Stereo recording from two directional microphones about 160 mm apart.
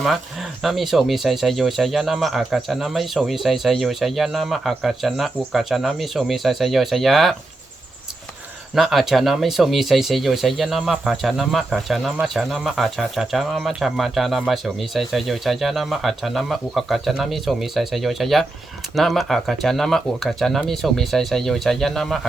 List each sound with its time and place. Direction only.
0.0 s speech: centre (ahead or behind)
8.7 s speech: centre (ahead or behind)